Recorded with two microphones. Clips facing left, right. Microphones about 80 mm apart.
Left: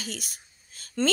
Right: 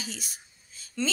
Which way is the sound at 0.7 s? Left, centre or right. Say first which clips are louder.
Left 4 dB; left.